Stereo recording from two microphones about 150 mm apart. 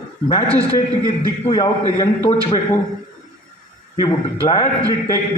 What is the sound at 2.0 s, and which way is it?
Speech, 40° left (ahead or behind).